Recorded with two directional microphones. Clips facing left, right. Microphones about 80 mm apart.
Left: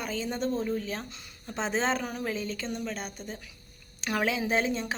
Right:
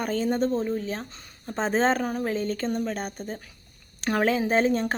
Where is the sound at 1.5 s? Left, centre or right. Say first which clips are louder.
Right 5 dB; right.